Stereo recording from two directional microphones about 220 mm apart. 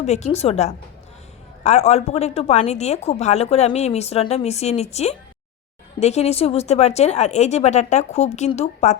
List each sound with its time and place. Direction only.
0.0 s a woman's voice: 30° left (ahead or behind)